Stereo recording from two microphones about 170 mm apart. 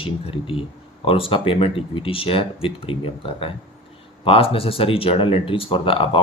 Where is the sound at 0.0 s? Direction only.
30° left (ahead or behind).